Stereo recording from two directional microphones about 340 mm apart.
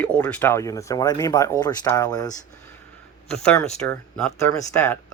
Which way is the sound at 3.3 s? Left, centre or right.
Centre.